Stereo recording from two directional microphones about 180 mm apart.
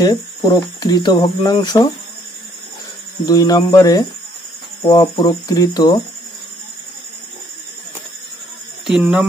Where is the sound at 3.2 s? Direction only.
20° left (ahead or behind).